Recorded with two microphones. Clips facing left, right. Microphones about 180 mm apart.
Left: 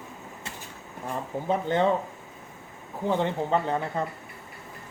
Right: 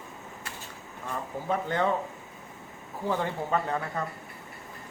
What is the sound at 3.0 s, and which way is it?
Speech, 20° left (ahead or behind).